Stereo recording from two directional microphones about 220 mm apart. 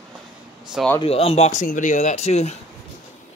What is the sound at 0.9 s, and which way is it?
Speech, 25° left (ahead or behind).